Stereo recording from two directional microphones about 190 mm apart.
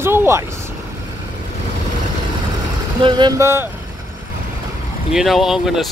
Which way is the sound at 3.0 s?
25° right (ahead or behind).